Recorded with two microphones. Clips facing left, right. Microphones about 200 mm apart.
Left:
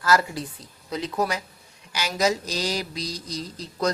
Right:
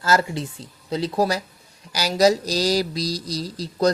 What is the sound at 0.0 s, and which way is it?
A woman's voice, 25° right (ahead or behind).